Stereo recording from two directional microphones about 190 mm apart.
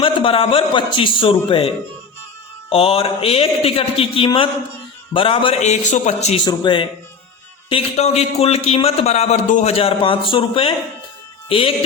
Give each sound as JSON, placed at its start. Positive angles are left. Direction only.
{"t": 0.0, "sound": "a man's voice", "side_deg": 25}
{"t": 6.4, "sound": "a man's voice", "side_deg": 25}